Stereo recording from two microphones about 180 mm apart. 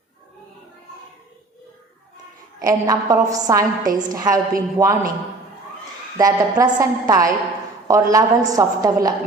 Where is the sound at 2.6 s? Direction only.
20° right (ahead or behind).